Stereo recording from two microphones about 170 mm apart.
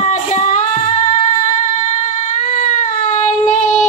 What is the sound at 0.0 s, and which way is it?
Music, 40° left (ahead or behind).